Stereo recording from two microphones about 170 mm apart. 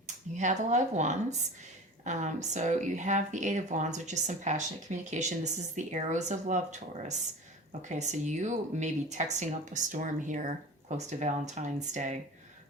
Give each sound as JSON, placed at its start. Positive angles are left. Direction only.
{"t": 0.3, "sound": "speech", "side_deg": -45}